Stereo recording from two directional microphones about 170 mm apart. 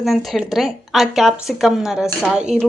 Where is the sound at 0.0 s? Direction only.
Centre (ahead or behind).